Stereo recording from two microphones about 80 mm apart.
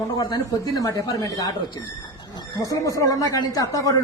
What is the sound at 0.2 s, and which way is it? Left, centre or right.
Speech, left.